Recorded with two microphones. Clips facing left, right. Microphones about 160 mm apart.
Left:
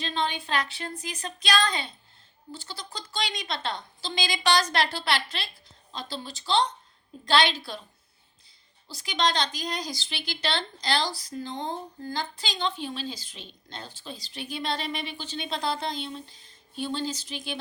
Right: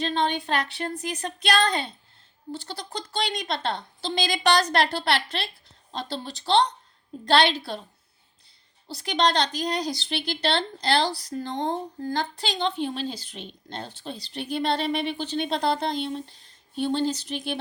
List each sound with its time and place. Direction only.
0.0 s speech: 55° right (ahead or behind)
8.9 s speech: 60° right (ahead or behind)